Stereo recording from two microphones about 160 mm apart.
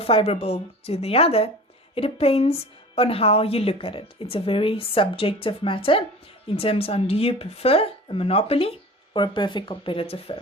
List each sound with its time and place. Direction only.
0.0 s a woman's voice: 35° left (ahead or behind)